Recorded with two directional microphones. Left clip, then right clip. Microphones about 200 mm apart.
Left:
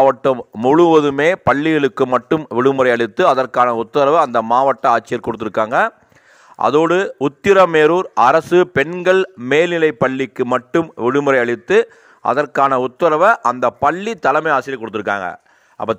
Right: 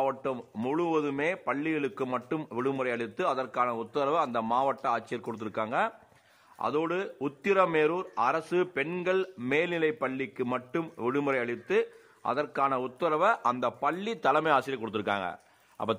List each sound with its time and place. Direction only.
0.0 s a man's voice: 40° left (ahead or behind)